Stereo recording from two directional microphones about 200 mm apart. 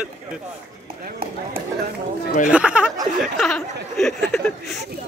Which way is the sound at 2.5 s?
5° right (ahead or behind).